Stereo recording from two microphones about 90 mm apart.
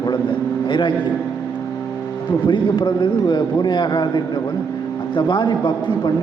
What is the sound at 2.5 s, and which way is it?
A man's voice, 65° left (ahead or behind).